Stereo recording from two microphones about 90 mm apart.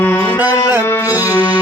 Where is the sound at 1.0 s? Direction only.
40° left (ahead or behind).